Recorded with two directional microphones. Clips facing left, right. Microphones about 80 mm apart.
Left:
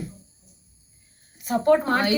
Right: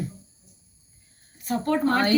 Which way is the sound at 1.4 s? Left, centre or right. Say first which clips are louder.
Left 4 dB; centre.